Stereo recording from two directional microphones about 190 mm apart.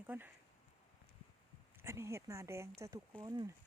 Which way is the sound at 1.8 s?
15° right (ahead or behind).